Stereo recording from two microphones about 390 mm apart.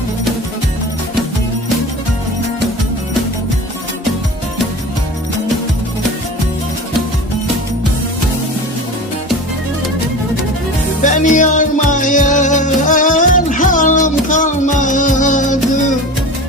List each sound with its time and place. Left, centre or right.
11.0 s music: centre